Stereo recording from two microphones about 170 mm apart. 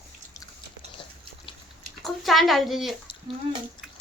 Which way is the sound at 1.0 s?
30° left (ahead or behind).